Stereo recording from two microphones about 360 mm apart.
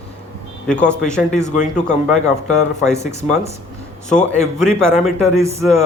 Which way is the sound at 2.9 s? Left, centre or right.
Centre.